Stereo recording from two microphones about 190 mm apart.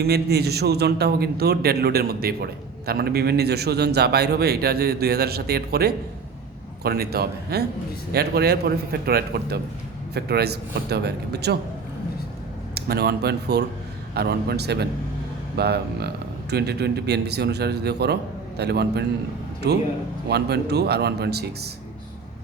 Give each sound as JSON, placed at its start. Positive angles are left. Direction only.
{"t": 0.0, "sound": "a man's voice", "side_deg": -55}
{"t": 12.7, "sound": "a man's voice", "side_deg": -55}